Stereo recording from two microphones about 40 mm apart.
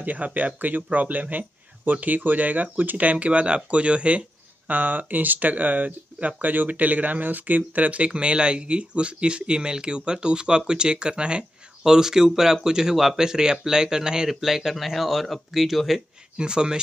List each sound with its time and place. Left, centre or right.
0.0 s speech: right
4.6 s speech: right
8.1 s speech: right
11.8 s speech: centre
16.3 s speech: right